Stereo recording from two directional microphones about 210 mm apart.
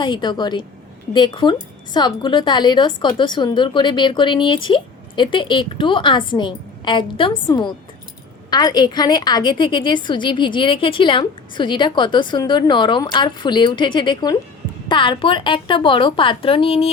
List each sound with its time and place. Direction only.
0.0 s a woman's voice: 20° left (ahead or behind)